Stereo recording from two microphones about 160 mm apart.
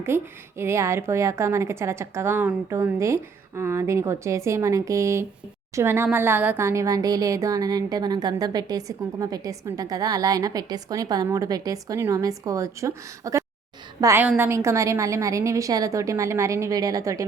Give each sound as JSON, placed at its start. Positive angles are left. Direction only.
{"t": 0.0, "sound": "a woman's voice", "side_deg": -15}